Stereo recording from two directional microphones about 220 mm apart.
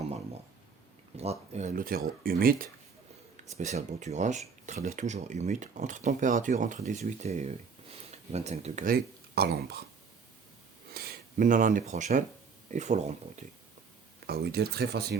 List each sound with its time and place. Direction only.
1.1 s speech: 30° right (ahead or behind); by 9.8 s 45° right (ahead or behind)
10.9 s speech: 45° right (ahead or behind)
14.3 s speech: 45° right (ahead or behind)